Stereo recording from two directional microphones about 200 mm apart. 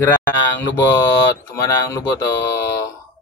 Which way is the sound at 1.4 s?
15° left (ahead or behind).